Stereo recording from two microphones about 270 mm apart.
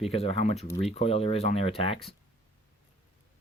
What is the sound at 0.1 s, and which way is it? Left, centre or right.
Speech, left.